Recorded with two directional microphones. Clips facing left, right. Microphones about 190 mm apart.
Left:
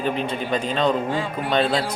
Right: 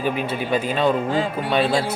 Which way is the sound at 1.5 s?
5° right (ahead or behind).